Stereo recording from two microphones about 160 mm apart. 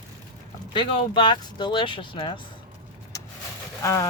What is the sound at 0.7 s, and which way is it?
Speech, 30° left (ahead or behind).